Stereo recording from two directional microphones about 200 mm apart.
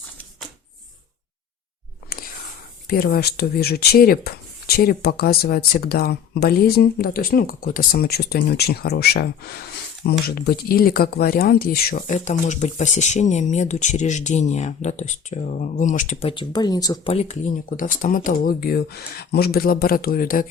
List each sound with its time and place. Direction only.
2.1 s whispering: 45° left (ahead or behind)
2.8 s speech: 50° left (ahead or behind)
16.3 s speech: 25° left (ahead or behind)
17.1 s speech: 35° left (ahead or behind)